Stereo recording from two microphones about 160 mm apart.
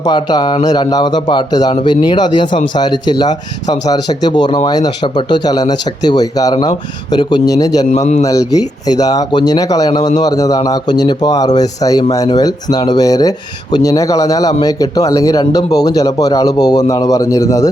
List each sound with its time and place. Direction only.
0.0 s a man's voice: 25° left (ahead or behind)
7.9 s a man's voice: 45° left (ahead or behind)
8.2 s a man's voice: 20° left (ahead or behind)